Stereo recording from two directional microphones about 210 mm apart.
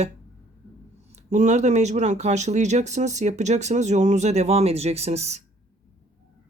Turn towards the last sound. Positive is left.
turn(degrees=-30)  # may be behind; listen again after turning